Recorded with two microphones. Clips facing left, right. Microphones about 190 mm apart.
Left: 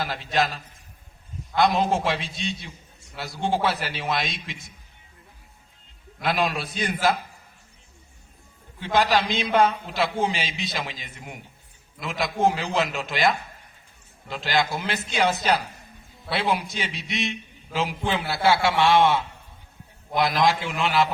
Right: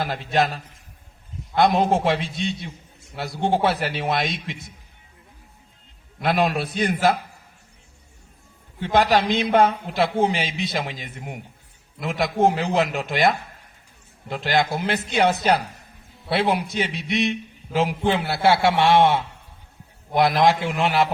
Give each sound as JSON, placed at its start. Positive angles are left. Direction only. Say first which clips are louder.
{"t": 0.0, "sound": "a man's voice", "louder": "right 3 dB", "side_deg": -55}
{"t": 6.2, "sound": "a man's voice", "louder": "right 4 dB", "side_deg": -55}
{"t": 8.8, "sound": "a man's voice", "louder": "right 3 dB", "side_deg": -55}
{"t": 20.4, "sound": "a man's voice", "louder": "right 3 dB", "side_deg": -55}